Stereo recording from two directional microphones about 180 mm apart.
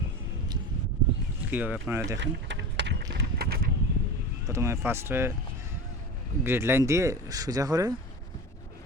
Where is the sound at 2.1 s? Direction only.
80° right; by 3.6 s 55° right (ahead or behind).